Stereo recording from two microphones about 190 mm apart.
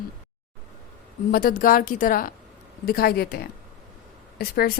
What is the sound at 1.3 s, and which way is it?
Speech, 45° left (ahead or behind).